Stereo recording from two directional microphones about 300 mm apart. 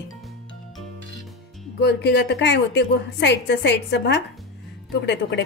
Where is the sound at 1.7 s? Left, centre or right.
Left.